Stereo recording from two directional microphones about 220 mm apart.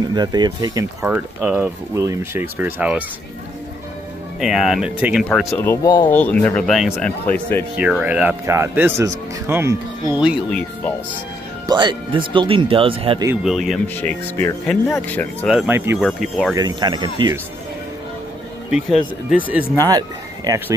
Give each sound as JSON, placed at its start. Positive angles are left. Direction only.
{"t": 0.1, "sound": "speech", "side_deg": -20}
{"t": 1.0, "sound": "speech", "side_deg": -5}
{"t": 4.4, "sound": "speech", "side_deg": 0}
{"t": 5.6, "sound": "speech", "side_deg": 15}
{"t": 7.7, "sound": "speech", "side_deg": -5}
{"t": 10.5, "sound": "speech", "side_deg": 10}
{"t": 11.6, "sound": "speech", "side_deg": -20}
{"t": 13.3, "sound": "speech", "side_deg": 0}
{"t": 15.5, "sound": "speech", "side_deg": -10}
{"t": 16.0, "sound": "speech", "side_deg": 0}
{"t": 16.5, "sound": "speech", "side_deg": -20}
{"t": 18.7, "sound": "speech", "side_deg": -5}